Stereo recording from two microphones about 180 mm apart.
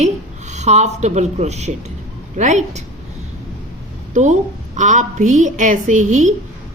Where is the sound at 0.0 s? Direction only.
40° right (ahead or behind).